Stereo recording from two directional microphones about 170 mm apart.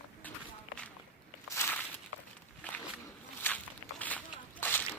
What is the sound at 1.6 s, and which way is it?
Walk, 15° left (ahead or behind).